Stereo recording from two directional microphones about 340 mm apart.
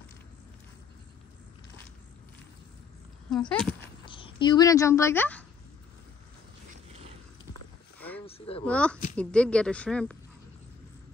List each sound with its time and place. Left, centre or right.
3.3 s speech: centre
4.0 s speech: centre
8.3 s speech: centre
8.6 s speech: centre